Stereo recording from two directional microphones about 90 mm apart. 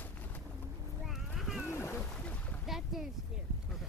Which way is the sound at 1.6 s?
30° left (ahead or behind).